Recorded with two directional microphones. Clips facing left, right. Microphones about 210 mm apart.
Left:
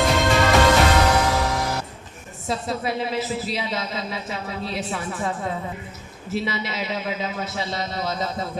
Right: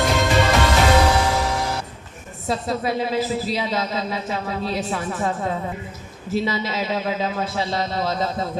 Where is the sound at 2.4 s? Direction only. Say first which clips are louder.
Right 3 dB; 50° right (ahead or behind).